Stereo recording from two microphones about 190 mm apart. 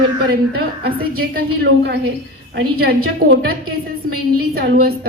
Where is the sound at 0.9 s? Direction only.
55° right (ahead or behind).